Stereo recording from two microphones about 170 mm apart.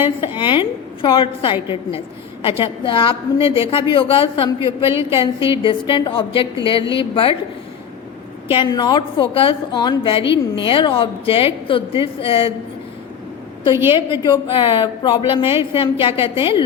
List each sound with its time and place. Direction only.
0.3 s a woman's voice: 25° left (ahead or behind)
4.9 s a woman's voice: 15° right (ahead or behind)
5.1 s a woman's voice: 30° left (ahead or behind)
8.4 s a woman's voice: 30° left (ahead or behind)
13.9 s a woman's voice: 30° left (ahead or behind)